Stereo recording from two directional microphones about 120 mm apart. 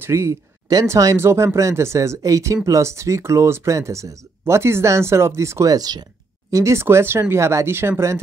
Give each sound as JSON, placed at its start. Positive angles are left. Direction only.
{"t": 0.0, "sound": "speech", "side_deg": -20}